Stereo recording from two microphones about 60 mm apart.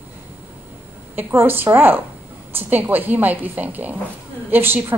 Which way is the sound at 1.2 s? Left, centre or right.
Right.